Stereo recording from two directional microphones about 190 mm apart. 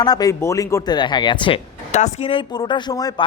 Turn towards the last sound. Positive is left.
turn(degrees=20)  # may be behind; listen again after turning